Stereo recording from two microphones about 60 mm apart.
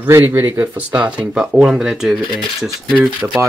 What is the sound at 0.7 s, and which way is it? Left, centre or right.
Speech, right.